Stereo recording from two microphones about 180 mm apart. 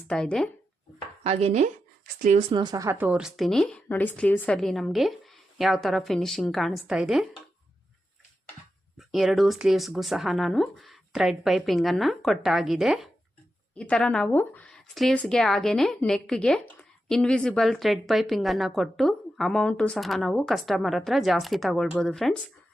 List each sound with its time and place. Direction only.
0.1 s a woman's voice: 5° left (ahead or behind)
1.2 s speech: 35° right (ahead or behind)
2.5 s a woman's voice: 25° right (ahead or behind); by 7.3 s 5° right (ahead or behind)
9.0 s a woman's voice: centre (ahead or behind)